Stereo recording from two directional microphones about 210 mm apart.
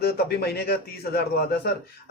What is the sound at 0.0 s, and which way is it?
A man's voice, 50° left (ahead or behind).